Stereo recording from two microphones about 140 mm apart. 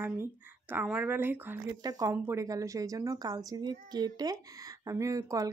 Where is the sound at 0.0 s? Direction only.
15° right (ahead or behind).